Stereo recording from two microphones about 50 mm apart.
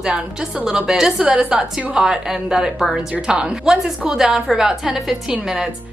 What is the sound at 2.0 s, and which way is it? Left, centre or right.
A woman's voice, centre.